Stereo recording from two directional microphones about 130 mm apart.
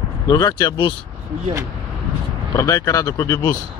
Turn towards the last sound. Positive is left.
turn(degrees=25)  # may be behind; listen again after turning